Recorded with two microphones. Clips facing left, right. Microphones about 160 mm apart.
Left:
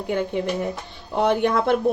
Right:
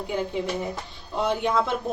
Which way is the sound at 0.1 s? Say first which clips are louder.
Left 4 dB; 60° left (ahead or behind).